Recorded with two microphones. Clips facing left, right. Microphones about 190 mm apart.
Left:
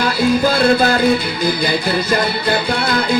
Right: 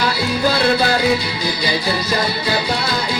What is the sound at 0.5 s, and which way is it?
Music, 50° left (ahead or behind).